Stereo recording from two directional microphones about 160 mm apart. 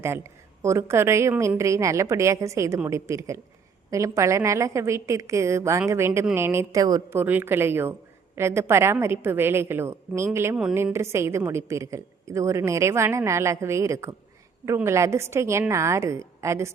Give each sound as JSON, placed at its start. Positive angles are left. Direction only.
{"t": 0.0, "sound": "a woman's voice", "side_deg": -15}